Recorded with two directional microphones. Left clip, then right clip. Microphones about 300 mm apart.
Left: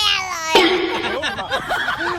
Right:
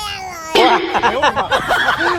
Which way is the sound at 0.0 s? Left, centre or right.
Centre.